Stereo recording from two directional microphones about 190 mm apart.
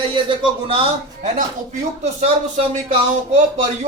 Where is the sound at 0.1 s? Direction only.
30° right (ahead or behind).